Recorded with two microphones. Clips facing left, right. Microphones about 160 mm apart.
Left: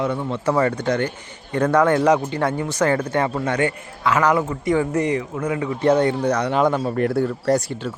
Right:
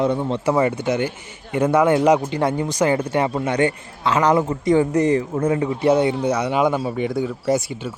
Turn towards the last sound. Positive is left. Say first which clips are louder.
# left 1 dB
turn(degrees=-5)  # may be behind; listen again after turning